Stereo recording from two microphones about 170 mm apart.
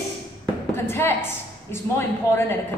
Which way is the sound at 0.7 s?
15° left (ahead or behind).